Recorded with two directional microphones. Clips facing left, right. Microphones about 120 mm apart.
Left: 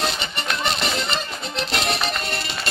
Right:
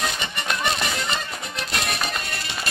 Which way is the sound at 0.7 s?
20° left (ahead or behind).